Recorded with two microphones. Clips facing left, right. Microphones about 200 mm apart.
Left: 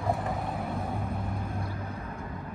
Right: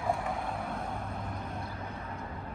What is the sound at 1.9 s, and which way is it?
Vehicle, 30° left (ahead or behind).